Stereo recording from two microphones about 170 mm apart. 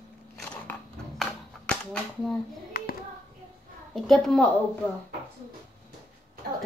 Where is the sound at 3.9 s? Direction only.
Centre (ahead or behind).